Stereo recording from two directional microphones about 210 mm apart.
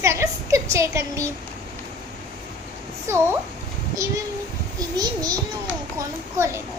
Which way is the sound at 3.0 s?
10° right (ahead or behind).